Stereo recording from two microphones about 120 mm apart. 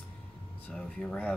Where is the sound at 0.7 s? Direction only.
5° left (ahead or behind).